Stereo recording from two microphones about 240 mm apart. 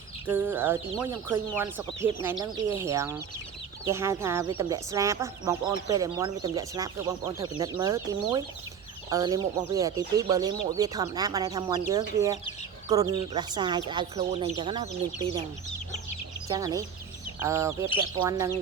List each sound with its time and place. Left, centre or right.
0.3 s speech: centre
16.5 s speech: centre